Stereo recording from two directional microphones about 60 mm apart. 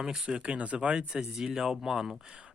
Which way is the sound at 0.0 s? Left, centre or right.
Centre.